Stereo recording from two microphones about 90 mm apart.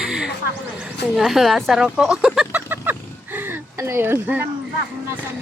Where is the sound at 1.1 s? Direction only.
5° right (ahead or behind).